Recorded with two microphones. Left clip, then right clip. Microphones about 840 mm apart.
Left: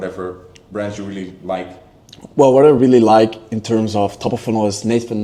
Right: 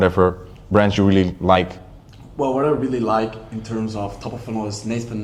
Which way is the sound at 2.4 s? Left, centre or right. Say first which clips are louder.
Left 10 dB; left.